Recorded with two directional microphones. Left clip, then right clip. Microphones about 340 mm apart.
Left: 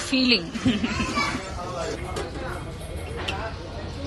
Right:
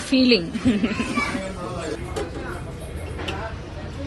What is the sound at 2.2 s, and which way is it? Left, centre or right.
Music, centre.